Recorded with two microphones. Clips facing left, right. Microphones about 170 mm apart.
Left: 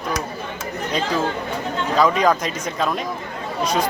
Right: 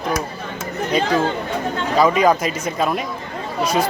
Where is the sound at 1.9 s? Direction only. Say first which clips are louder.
Right 2 dB; 5° right (ahead or behind).